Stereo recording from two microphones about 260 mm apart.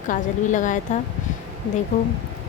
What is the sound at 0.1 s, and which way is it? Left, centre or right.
Speech, left.